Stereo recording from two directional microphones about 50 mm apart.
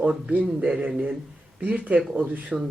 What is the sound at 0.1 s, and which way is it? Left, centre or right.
Speech, centre.